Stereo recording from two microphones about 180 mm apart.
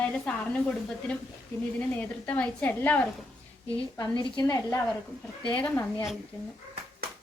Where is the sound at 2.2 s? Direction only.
10° left (ahead or behind).